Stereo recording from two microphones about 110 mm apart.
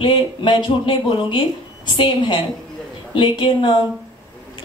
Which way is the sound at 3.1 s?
45° left (ahead or behind).